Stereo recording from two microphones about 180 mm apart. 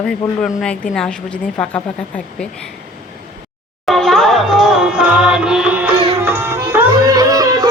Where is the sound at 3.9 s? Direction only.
Centre (ahead or behind).